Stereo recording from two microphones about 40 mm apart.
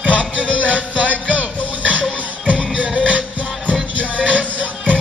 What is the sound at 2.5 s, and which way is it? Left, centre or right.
Music, right.